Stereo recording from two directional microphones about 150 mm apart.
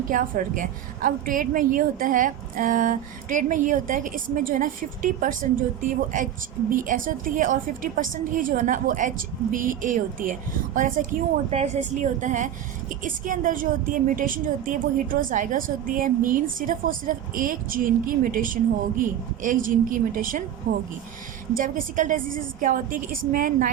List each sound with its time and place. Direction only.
0.1 s a woman's voice: 60° right (ahead or behind)
11.5 s a woman's voice: 45° right (ahead or behind); by 23.6 s 70° right (ahead or behind)